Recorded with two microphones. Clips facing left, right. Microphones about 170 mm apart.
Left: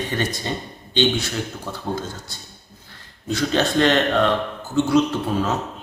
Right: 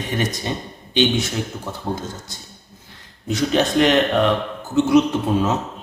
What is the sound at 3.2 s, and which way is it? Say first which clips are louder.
A man's voice: right 2 dB; 15° right (ahead or behind).